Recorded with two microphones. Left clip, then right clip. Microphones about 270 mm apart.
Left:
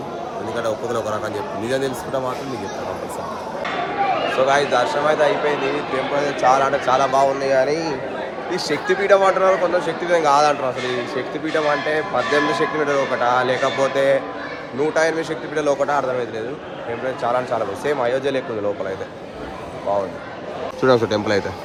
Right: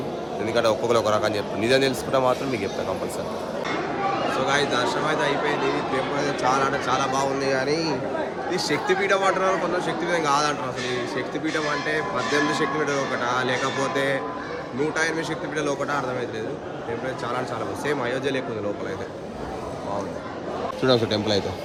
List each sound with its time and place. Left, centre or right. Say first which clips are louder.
0.9 s a man's voice: right 2 dB; centre
4.4 s a man's voice: left 6 dB; centre
11.9 s a man's voice: left 5 dB; centre
17.8 s a man's voice: left 4 dB; centre
21.0 s speech: left 4 dB; centre